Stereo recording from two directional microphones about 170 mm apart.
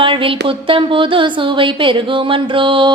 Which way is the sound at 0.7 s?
30° right (ahead or behind).